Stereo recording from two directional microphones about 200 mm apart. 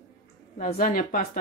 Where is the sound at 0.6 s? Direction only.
40° left (ahead or behind).